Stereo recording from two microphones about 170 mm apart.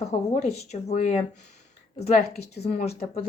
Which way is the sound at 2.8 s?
35° left (ahead or behind).